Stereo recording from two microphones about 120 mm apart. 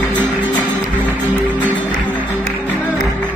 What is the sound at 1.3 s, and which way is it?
Music, 15° left (ahead or behind).